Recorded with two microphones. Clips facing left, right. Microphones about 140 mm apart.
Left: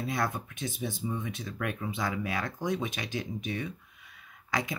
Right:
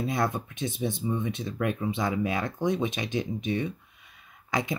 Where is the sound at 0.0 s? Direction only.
25° right (ahead or behind).